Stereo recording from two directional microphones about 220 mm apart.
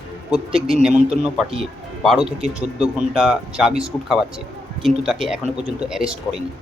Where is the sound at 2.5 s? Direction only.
5° right (ahead or behind).